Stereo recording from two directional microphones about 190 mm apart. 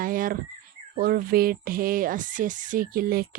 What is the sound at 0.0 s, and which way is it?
Bird, 45° right (ahead or behind).